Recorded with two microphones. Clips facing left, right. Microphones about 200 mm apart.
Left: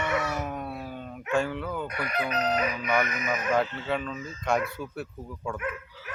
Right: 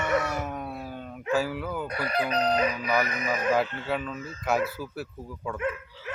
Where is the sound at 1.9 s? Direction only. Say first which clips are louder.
Right 2 dB; 35° right (ahead or behind).